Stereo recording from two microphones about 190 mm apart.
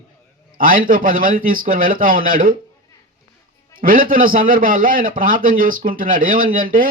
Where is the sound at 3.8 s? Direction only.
50° right (ahead or behind).